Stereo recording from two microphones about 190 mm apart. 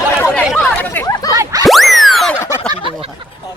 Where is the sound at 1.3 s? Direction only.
20° right (ahead or behind).